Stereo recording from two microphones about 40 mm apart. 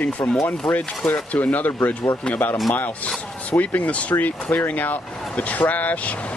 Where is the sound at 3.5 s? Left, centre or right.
Left.